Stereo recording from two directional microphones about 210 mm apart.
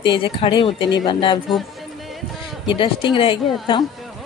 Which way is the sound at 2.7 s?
25° left (ahead or behind).